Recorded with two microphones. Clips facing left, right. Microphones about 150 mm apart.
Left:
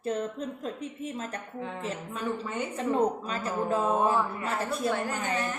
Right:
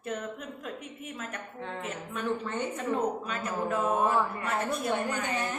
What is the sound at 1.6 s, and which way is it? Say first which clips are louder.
A woman's voice: left 3 dB; 5° left (ahead or behind).